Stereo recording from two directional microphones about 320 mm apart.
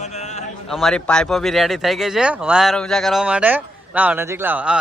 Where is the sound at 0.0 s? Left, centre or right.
Left.